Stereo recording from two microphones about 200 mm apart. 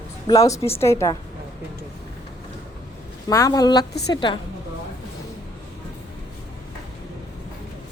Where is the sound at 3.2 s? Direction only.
15° left (ahead or behind).